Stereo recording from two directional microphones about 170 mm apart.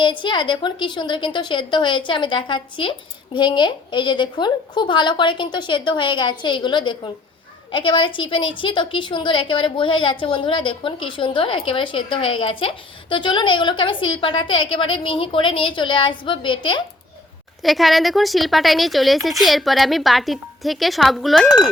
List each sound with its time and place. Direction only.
0.0 s a woman's voice: 30° left (ahead or behind)
17.6 s a woman's voice: centre (ahead or behind)